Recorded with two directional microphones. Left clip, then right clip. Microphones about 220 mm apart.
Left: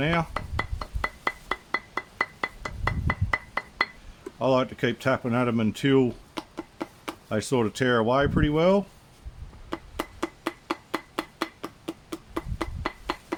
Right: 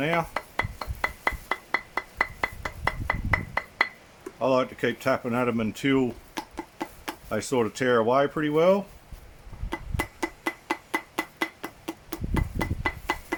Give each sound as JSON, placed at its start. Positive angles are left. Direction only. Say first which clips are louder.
{"t": 0.0, "sound": "speech", "louder": "even", "side_deg": 35}
{"t": 0.3, "sound": "music", "louder": "right 2 dB", "side_deg": 0}
{"t": 4.4, "sound": "speech", "louder": "even", "side_deg": 35}
{"t": 6.3, "sound": "a sound", "louder": "right 1 dB", "side_deg": 0}
{"t": 7.3, "sound": "speech", "louder": "even", "side_deg": 35}
{"t": 9.6, "sound": "a sound", "louder": "right 2 dB", "side_deg": 0}